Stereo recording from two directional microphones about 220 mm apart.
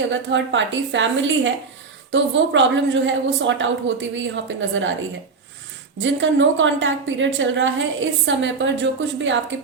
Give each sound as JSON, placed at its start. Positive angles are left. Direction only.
{"t": 0.0, "sound": "a woman's voice", "side_deg": -55}
{"t": 6.0, "sound": "a woman's voice", "side_deg": -55}